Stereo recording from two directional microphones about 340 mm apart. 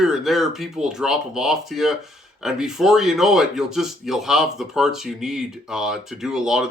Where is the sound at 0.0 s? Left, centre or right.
Centre.